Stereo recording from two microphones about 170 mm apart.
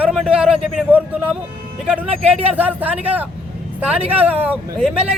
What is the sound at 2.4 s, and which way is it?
Speech, 10° right (ahead or behind).